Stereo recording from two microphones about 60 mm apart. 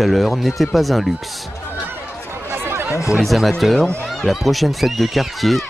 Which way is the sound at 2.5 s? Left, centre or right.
Right.